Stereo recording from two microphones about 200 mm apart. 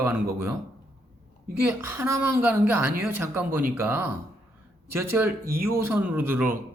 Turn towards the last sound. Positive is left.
turn(degrees=-10)  # may be behind; listen again after turning